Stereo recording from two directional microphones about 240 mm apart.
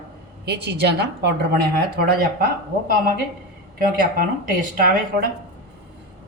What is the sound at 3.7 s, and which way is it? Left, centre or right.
Speech, right.